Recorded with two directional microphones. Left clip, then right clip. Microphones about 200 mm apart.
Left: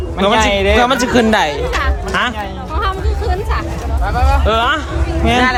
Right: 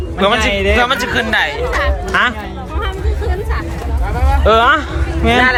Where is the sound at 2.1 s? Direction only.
15° left (ahead or behind).